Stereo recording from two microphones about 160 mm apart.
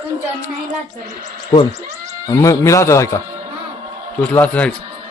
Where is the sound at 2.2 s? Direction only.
20° left (ahead or behind).